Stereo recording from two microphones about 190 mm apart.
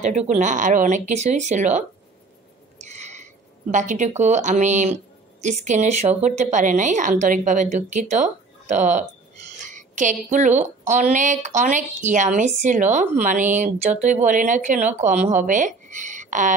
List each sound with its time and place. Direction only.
0.0 s speech: 35° right (ahead or behind)
2.8 s a sound: 35° right (ahead or behind)
3.7 s speech: 40° right (ahead or behind)